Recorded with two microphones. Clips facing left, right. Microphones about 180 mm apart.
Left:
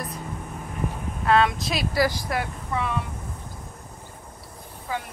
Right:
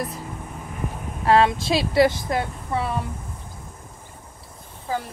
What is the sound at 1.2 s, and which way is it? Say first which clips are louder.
Speech: right 3 dB; 30° right (ahead or behind).